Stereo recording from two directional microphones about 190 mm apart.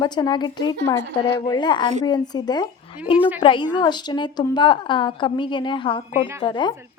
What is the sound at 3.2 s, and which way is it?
Speech, 10° right (ahead or behind).